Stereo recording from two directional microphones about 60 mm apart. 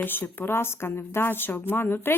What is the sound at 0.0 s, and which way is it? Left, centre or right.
Speech, left.